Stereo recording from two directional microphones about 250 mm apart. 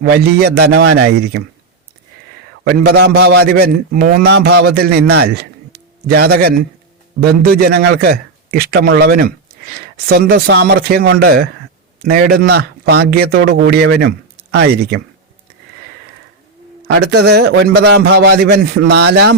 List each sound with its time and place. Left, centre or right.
0.0 s a man's voice: right
2.7 s a man's voice: right
17.0 s a man's voice: right